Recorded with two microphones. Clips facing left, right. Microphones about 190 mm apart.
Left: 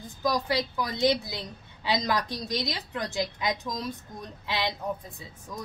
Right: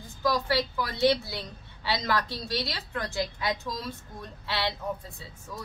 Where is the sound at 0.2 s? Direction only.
15° left (ahead or behind).